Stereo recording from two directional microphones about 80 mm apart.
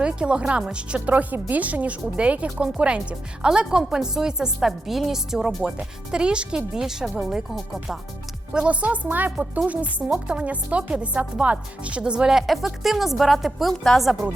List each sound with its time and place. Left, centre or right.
0.0 s speech: centre
8.5 s speech: centre